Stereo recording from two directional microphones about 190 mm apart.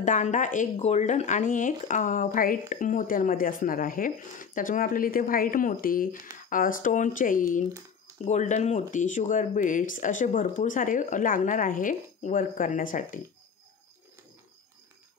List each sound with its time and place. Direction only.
0.0 s speech: 40° left (ahead or behind)